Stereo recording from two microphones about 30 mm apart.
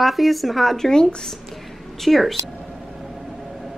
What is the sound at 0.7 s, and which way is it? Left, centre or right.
Speech, centre.